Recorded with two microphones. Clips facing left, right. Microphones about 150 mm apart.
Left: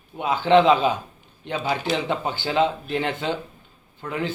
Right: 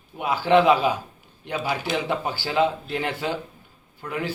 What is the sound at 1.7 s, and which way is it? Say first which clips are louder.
Speech: left 2 dB; 10° right (ahead or behind).